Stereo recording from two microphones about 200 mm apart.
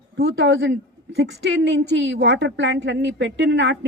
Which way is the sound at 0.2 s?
60° right (ahead or behind).